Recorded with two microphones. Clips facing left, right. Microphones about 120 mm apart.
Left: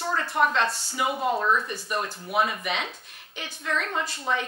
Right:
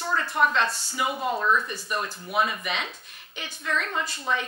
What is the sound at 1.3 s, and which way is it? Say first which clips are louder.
Speech: even; 30° left (ahead or behind).